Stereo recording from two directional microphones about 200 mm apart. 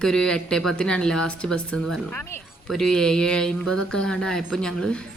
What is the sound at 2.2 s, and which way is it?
Speech, 10° left (ahead or behind).